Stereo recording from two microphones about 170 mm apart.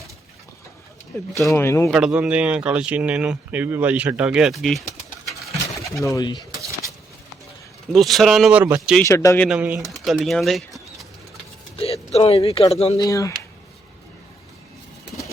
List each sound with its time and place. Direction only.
1.5 s a man's voice: 15° left (ahead or behind)
1.9 s speech: 5° right (ahead or behind)
6.0 s speech: 20° left (ahead or behind)
7.9 s speech: centre (ahead or behind)
9.0 s a man's voice: 15° left (ahead or behind)
9.5 s speech: 10° right (ahead or behind)
11.8 s speech: 35° left (ahead or behind)
13.0 s speech: 20° left (ahead or behind)